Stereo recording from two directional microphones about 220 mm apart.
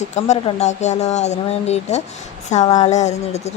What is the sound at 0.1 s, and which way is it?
A woman's voice, 30° left (ahead or behind).